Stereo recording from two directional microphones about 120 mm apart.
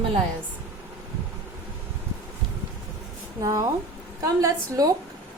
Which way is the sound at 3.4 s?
30° right (ahead or behind).